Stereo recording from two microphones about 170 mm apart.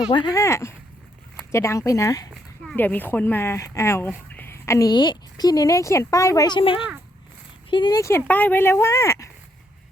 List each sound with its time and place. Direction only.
0.1 s a woman's voice: 25° left (ahead or behind)